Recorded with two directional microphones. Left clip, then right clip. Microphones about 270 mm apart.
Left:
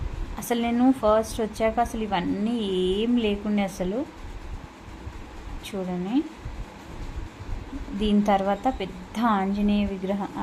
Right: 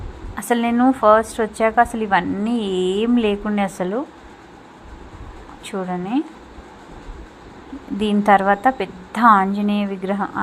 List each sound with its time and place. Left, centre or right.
0.3 s a woman's voice: centre
5.7 s a woman's voice: centre
8.3 s a woman's voice: centre